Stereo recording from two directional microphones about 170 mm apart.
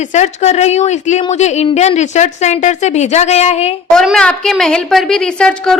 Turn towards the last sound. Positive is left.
turn(degrees=5)  # may be behind; listen again after turning